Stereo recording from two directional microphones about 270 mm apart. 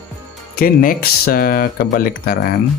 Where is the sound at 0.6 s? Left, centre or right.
Left.